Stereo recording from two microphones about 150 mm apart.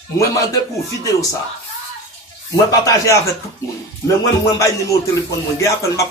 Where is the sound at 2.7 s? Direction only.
20° left (ahead or behind).